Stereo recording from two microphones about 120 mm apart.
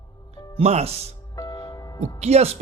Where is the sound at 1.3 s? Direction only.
30° left (ahead or behind).